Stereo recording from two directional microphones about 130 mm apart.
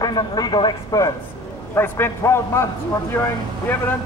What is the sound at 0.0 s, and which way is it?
A man's voice, 35° left (ahead or behind).